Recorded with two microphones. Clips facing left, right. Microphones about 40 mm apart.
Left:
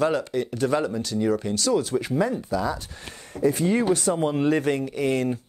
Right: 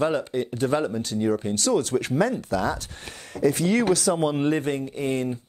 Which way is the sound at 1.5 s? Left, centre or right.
Right.